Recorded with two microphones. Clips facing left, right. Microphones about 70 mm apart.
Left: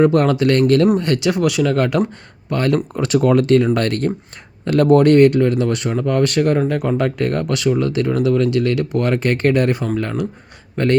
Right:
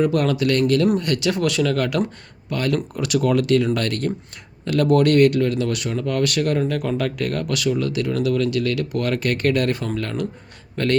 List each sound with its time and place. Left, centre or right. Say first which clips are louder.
0.0 s speech: left 5 dB; left
1.3 s speech: left 3 dB; centre
1.7 s speech: left 4 dB; left